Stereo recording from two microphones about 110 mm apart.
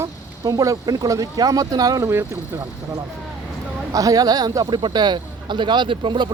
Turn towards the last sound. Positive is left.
turn(degrees=-45)  # may be behind; listen again after turning